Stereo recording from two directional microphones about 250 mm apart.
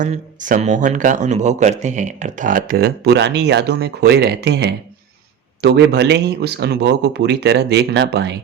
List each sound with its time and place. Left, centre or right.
0.0 s a man's voice: right